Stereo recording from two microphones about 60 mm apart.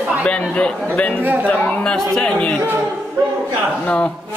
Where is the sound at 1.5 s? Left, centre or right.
Left.